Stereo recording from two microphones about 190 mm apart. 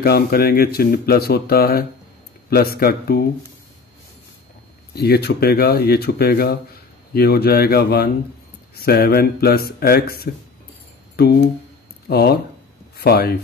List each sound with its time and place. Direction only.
0.0 s speech: 55° left (ahead or behind)
4.9 s speech: 55° left (ahead or behind)
12.1 s speech: 55° left (ahead or behind)